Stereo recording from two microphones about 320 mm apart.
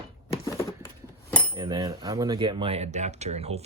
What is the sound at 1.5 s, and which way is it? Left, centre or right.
Speech, centre.